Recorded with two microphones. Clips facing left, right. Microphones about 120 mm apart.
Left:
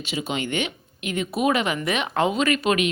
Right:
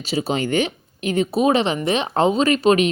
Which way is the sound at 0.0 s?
35° right (ahead or behind).